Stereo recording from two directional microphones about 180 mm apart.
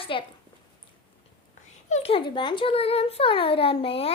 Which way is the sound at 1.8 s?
35° left (ahead or behind).